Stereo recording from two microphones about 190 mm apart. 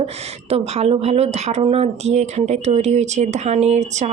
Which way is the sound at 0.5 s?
35° right (ahead or behind).